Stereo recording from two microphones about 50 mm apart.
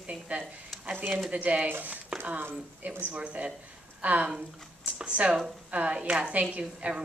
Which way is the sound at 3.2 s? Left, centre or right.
Right.